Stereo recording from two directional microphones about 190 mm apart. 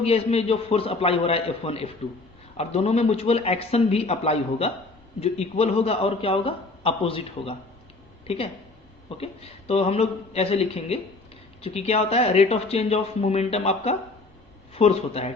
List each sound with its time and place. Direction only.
0.0 s a man's voice: 30° left (ahead or behind)
9.0 s a man's voice: 30° left (ahead or behind)